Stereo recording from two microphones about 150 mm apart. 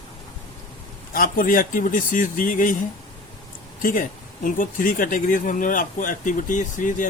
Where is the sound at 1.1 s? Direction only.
70° left (ahead or behind).